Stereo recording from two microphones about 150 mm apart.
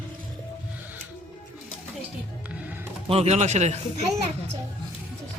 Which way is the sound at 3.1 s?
45° right (ahead or behind).